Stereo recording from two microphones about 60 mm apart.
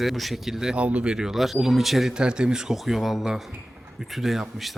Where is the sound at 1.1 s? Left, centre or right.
Centre.